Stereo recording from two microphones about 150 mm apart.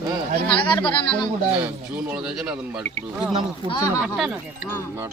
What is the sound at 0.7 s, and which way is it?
Speech, 30° left (ahead or behind).